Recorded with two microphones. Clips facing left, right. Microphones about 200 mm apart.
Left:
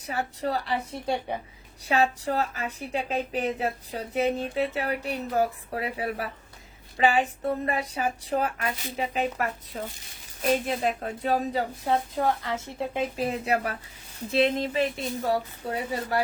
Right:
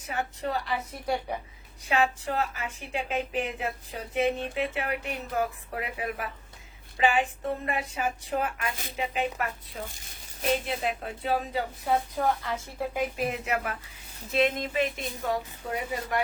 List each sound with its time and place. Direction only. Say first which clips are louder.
0.0 s a woman's voice: left 2 dB; 35° left (ahead or behind)
11.9 s a woman's voice: even; 25° left (ahead or behind)